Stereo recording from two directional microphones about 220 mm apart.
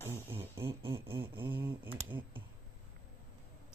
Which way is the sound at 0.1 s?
10° right (ahead or behind).